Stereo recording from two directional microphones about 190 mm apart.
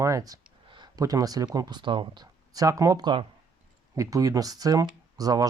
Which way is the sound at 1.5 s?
20° right (ahead or behind).